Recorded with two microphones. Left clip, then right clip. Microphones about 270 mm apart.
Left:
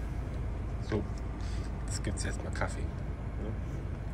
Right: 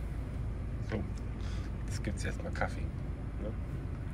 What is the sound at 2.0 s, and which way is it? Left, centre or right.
Speech, centre.